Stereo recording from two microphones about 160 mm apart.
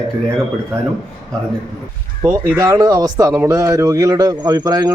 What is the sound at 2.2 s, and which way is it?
Speech, 15° right (ahead or behind).